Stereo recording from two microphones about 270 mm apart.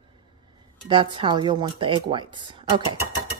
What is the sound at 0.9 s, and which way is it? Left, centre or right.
Speech, centre.